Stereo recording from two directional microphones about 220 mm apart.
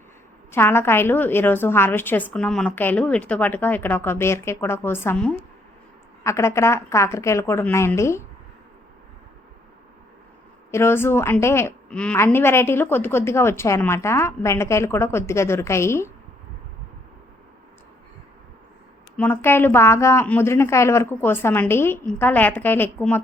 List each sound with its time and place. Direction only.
0.5 s a woman's voice: 10° left (ahead or behind)
10.7 s a woman's voice: 10° left (ahead or behind)
19.1 s a woman's voice: 10° left (ahead or behind)